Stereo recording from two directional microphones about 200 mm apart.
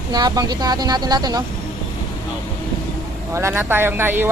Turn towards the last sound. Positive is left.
turn(degrees=-10)  # may be behind; listen again after turning